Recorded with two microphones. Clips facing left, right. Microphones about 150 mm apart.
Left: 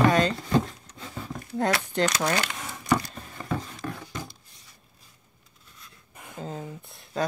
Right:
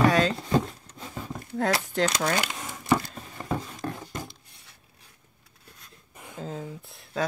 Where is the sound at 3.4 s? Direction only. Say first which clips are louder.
Right 1 dB; 20° right (ahead or behind).